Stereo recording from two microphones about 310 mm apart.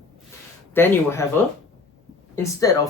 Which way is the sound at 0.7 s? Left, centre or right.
Centre.